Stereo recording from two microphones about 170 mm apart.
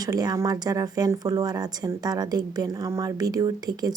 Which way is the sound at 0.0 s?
20° right (ahead or behind).